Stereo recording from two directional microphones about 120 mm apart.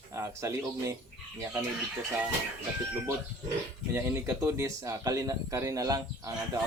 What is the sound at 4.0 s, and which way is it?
Speech, 25° right (ahead or behind).